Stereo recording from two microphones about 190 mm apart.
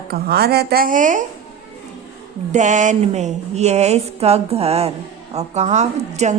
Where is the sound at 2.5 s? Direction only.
40° right (ahead or behind).